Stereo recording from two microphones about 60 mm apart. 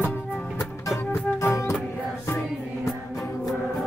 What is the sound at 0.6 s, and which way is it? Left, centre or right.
Music, left.